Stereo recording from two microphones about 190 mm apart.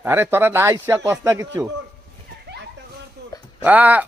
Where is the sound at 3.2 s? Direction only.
60° right (ahead or behind).